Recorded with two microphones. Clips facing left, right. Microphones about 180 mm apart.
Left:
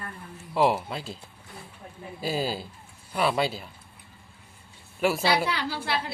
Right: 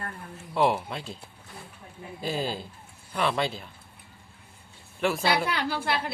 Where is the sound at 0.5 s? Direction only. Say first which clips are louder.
Left 1 dB; centre (ahead or behind).